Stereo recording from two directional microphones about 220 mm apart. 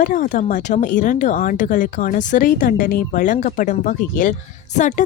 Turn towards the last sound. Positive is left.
turn(degrees=35)  # may be behind; listen again after turning